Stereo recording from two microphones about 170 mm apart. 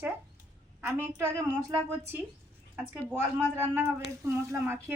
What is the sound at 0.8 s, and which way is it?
Speech, 15° right (ahead or behind).